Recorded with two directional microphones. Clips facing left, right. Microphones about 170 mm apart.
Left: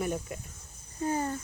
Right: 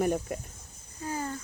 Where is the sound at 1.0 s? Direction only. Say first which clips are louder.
Left 4 dB; 25° left (ahead or behind).